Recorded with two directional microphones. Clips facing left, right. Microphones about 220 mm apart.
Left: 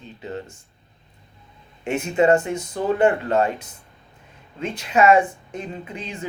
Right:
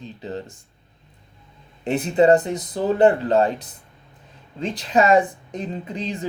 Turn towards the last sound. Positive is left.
turn(degrees=-35)  # may be behind; listen again after turning